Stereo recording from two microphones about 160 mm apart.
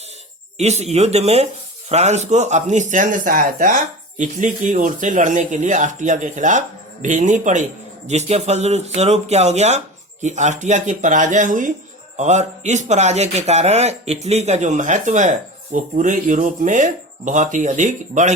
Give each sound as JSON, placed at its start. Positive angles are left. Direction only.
{"t": 0.6, "sound": "a man's voice", "side_deg": -45}